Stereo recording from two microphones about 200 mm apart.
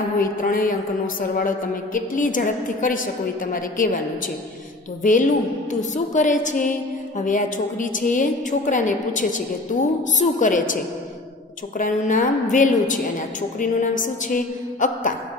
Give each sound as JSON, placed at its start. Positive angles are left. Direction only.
{"t": 0.2, "sound": "a woman's voice", "side_deg": 45}
{"t": 5.0, "sound": "a woman's voice", "side_deg": 40}
{"t": 11.8, "sound": "a woman's voice", "side_deg": 40}